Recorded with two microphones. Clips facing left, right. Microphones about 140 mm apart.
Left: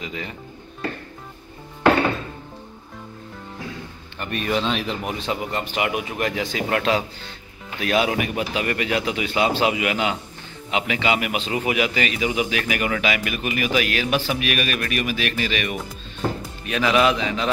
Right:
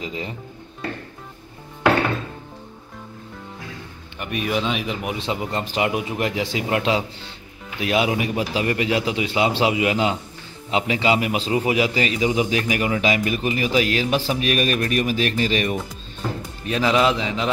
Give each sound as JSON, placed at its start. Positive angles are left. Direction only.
{"t": 0.0, "sound": "a man's voice", "side_deg": -25}
{"t": 4.2, "sound": "speech", "side_deg": -10}
{"t": 5.5, "sound": "a man's voice", "side_deg": -25}